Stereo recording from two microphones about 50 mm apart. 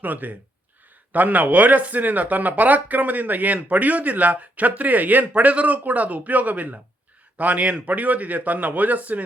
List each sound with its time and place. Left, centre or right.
0.0 s speech: right